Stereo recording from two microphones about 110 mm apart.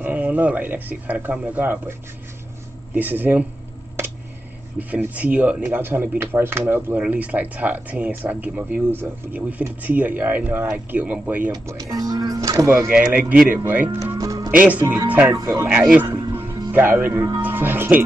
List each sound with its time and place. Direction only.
0.0 s speech: 15° right (ahead or behind)
4.7 s speech: 15° right (ahead or behind)
11.6 s speech: 35° right (ahead or behind)
12.9 s speech: 10° right (ahead or behind)
14.1 s music: 35° right (ahead or behind)
14.5 s speech: 15° right (ahead or behind)
15.3 s speech: 30° right (ahead or behind)
15.7 s speech: 10° right (ahead or behind)
16.1 s music: 20° right (ahead or behind)
17.4 s speech: 20° right (ahead or behind)